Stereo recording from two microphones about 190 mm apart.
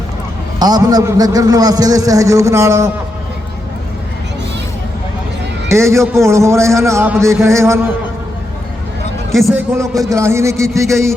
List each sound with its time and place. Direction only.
0.6 s a man's voice: 20° right (ahead or behind)
5.6 s a man's voice: 15° right (ahead or behind)
9.3 s a man's voice: centre (ahead or behind)
9.6 s a man's voice: 15° right (ahead or behind)